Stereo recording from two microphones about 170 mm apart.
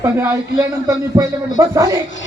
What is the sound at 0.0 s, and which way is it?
Speech, 15° right (ahead or behind).